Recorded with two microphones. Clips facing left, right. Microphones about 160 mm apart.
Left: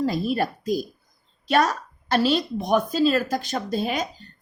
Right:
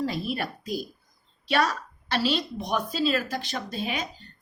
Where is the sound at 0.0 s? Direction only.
40° left (ahead or behind).